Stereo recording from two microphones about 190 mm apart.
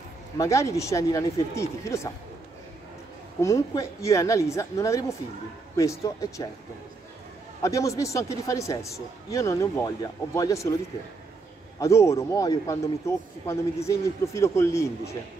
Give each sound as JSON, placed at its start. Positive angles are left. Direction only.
{"t": 0.4, "sound": "a man's voice", "side_deg": 15}
{"t": 3.3, "sound": "a man's voice", "side_deg": 15}
{"t": 7.6, "sound": "a man's voice", "side_deg": 15}
{"t": 11.8, "sound": "a man's voice", "side_deg": 15}